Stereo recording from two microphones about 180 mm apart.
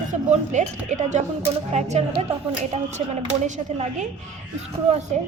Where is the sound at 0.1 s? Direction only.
40° right (ahead or behind).